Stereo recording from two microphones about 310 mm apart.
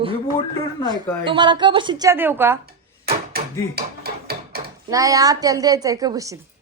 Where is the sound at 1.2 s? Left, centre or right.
Centre.